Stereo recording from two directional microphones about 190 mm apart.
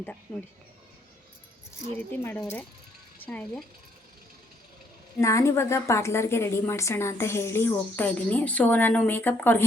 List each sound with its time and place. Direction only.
0.3 s a woman's voice: 15° left (ahead or behind)
1.9 s a woman's voice: 10° left (ahead or behind)
5.2 s a woman's voice: 15° left (ahead or behind)